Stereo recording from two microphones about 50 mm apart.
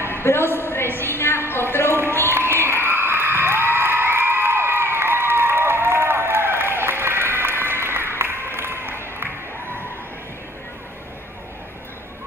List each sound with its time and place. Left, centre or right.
0.0 s a woman's voice: left
1.5 s a sound: left
2.5 s cheering: right